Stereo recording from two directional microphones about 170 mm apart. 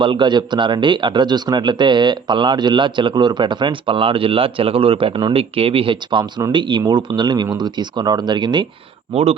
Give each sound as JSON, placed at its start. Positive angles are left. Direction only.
{"t": 0.0, "sound": "a man's voice", "side_deg": -30}